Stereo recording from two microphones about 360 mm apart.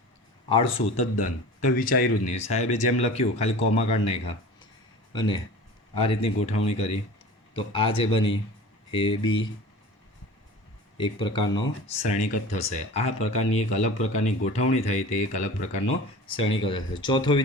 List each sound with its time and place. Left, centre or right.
0.4 s speech: centre
10.9 s speech: centre
16.3 s speech: centre